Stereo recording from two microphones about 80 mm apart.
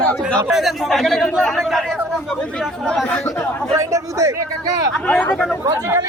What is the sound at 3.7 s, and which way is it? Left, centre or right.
Speech, right.